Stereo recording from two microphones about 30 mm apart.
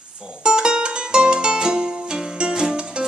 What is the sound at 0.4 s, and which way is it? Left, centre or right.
Music, right.